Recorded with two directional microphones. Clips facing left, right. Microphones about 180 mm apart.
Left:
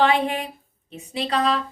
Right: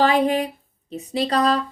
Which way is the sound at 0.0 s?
40° right (ahead or behind).